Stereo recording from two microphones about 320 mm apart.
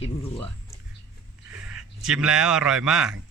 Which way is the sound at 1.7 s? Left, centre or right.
Centre.